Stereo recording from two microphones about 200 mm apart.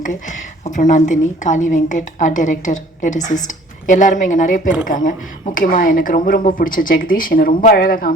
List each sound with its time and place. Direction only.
0.0 s a woman's voice: 40° left (ahead or behind)